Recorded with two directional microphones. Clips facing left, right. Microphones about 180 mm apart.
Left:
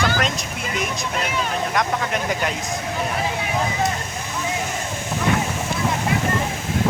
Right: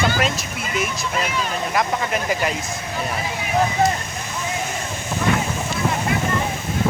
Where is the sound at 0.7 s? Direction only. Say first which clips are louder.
Right 2 dB; 5° right (ahead or behind).